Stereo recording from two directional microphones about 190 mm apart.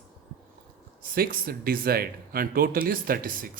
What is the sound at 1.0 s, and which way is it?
A man's voice, 50° right (ahead or behind).